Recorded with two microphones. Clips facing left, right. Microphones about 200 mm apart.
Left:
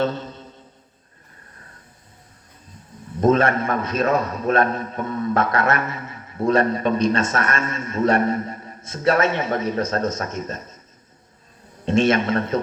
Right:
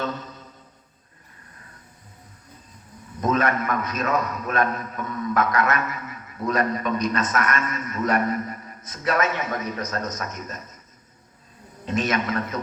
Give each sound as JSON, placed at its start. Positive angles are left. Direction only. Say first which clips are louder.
{"t": 0.0, "sound": "mantra", "louder": "left 6 dB", "side_deg": 30}
{"t": 3.2, "sound": "a man's voice", "louder": "left 5 dB", "side_deg": 30}
{"t": 11.9, "sound": "a man's voice", "louder": "left 6 dB", "side_deg": 30}